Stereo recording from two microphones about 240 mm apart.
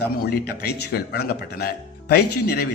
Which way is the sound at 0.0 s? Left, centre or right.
Left.